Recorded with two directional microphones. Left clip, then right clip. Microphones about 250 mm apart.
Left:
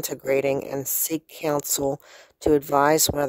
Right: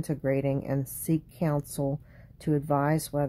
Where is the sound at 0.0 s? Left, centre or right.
Left.